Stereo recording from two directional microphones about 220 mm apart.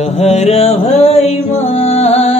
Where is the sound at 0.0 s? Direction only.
30° left (ahead or behind).